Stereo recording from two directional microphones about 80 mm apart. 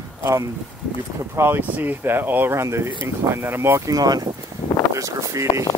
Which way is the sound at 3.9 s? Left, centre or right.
Right.